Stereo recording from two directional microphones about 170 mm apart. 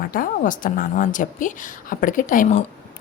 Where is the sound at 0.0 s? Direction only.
55° left (ahead or behind).